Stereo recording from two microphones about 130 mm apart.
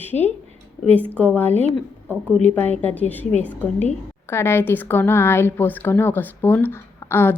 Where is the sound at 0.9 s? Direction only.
10° left (ahead or behind).